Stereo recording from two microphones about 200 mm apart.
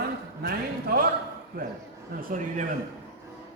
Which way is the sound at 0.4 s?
50° right (ahead or behind).